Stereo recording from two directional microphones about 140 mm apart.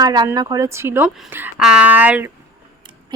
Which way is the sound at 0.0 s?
30° right (ahead or behind).